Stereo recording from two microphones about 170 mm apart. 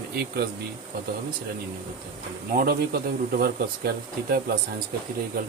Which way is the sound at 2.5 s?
60° right (ahead or behind).